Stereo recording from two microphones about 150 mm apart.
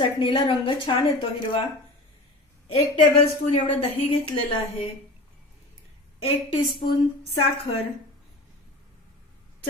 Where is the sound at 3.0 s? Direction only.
40° left (ahead or behind).